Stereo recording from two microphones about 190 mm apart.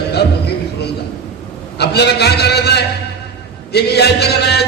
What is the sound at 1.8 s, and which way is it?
A man's voice, 60° left (ahead or behind).